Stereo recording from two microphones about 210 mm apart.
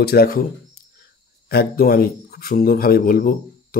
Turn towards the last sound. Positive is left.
turn(degrees=45)  # may be behind; listen again after turning